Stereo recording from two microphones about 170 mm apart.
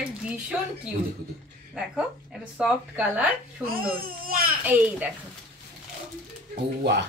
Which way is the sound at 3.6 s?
60° right (ahead or behind).